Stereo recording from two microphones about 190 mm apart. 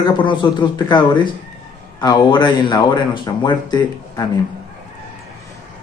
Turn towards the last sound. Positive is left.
turn(degrees=25)  # may be behind; listen again after turning